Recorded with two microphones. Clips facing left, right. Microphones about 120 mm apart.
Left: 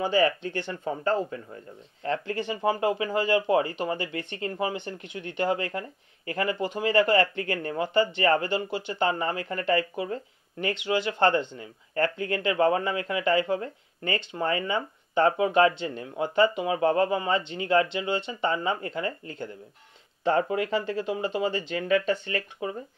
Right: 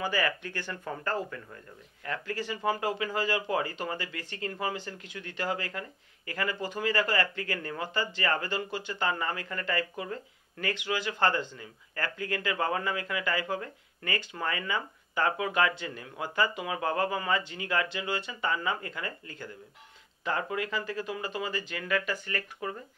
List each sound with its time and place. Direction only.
0.0 s speech: 25° left (ahead or behind)